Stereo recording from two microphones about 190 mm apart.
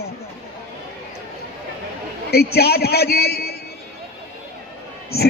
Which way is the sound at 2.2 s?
55° left (ahead or behind).